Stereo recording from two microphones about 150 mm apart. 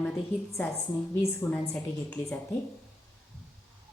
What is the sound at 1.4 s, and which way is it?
Speech, 15° left (ahead or behind).